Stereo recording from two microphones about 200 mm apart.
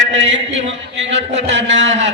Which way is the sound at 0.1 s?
65° right (ahead or behind).